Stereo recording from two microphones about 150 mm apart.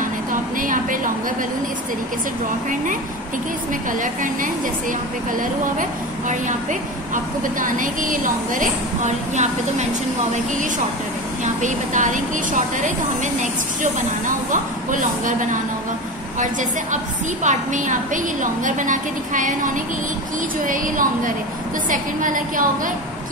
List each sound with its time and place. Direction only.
0.3 s a sound: 60° right (ahead or behind)
4.0 s a woman's voice: 60° right (ahead or behind)
5.8 s a woman's voice: 55° right (ahead or behind)
11.4 s a woman's voice: 55° right (ahead or behind)
16.3 s a woman's voice: 55° right (ahead or behind)